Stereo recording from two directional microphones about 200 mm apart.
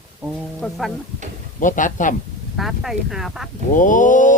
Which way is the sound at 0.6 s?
Centre (ahead or behind).